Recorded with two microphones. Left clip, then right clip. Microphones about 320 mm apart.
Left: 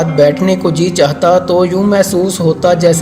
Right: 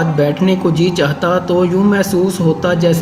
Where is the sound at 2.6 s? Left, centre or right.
Centre.